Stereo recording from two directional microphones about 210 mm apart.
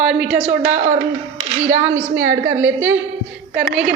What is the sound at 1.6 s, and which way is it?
A woman's voice, 15° right (ahead or behind).